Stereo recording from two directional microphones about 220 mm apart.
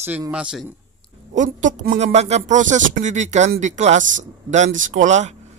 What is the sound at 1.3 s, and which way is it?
Speech, 35° right (ahead or behind).